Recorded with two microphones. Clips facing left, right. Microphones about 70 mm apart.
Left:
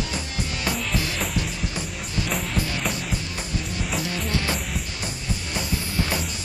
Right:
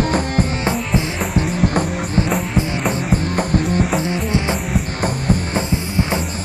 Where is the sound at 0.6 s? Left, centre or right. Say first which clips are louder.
Right 7 dB; right.